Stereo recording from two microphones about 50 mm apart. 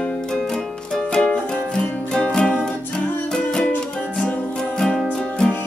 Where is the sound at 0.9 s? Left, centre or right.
Centre.